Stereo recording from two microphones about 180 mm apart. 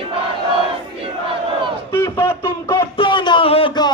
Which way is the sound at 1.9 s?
15° left (ahead or behind).